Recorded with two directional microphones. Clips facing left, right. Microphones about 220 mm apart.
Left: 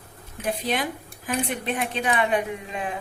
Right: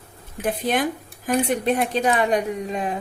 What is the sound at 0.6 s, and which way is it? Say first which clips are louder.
A woman's voice: right 5 dB; 50° right (ahead or behind).